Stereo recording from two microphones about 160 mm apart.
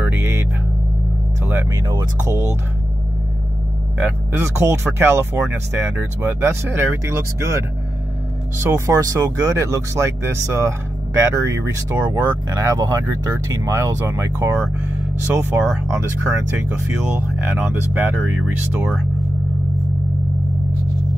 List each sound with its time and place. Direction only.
0.0 s music: 15° right (ahead or behind)
1.9 s speech: 25° right (ahead or behind)
4.0 s speech: 15° right (ahead or behind)